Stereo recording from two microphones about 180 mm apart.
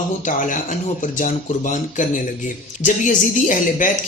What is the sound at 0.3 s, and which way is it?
Speech, 45° left (ahead or behind).